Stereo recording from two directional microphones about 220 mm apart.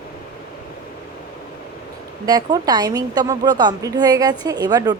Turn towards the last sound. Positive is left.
turn(degrees=-15)  # may be behind; listen again after turning